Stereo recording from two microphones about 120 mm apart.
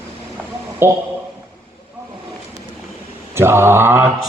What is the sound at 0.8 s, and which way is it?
Speech, 20° right (ahead or behind).